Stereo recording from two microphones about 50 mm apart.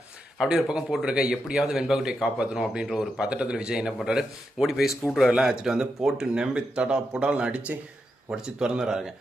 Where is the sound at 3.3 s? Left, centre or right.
Right.